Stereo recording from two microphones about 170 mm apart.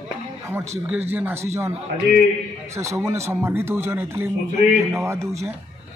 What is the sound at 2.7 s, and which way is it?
A man's voice, 15° right (ahead or behind).